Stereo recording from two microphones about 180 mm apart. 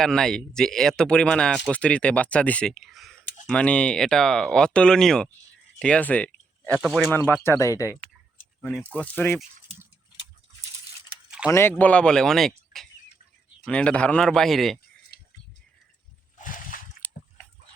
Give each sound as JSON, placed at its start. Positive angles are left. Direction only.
{"t": 0.0, "sound": "speech", "side_deg": 5}
{"t": 5.8, "sound": "a sound", "side_deg": 5}
{"t": 6.7, "sound": "speech", "side_deg": -5}
{"t": 7.1, "sound": "speech", "side_deg": 10}
{"t": 11.4, "sound": "speech", "side_deg": 15}
{"t": 16.4, "sound": "slosh", "side_deg": 50}
{"t": 17.0, "sound": "a sound", "side_deg": 10}